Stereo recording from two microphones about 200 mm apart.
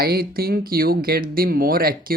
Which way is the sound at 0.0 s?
50° right (ahead or behind).